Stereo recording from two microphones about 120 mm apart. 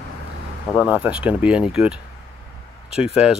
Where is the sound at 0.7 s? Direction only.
10° right (ahead or behind).